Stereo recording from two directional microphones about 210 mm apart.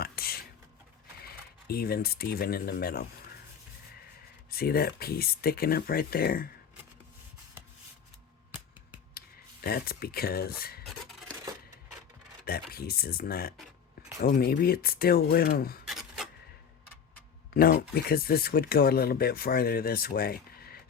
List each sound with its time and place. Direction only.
0.0 s a sound: 45° left (ahead or behind)
1.2 s speech: 45° left (ahead or behind)
4.5 s speech: 45° left (ahead or behind)
9.1 s speech: 45° left (ahead or behind)
10.8 s a sound: centre (ahead or behind)
12.5 s speech: 45° left (ahead or behind)
15.9 s filing: centre (ahead or behind)
17.5 s speech: 45° left (ahead or behind)